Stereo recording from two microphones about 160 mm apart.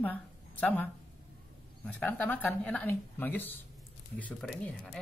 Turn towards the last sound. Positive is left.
turn(degrees=5)  # may be behind; listen again after turning